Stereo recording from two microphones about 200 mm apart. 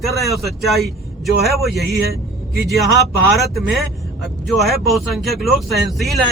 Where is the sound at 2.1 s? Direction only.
50° right (ahead or behind).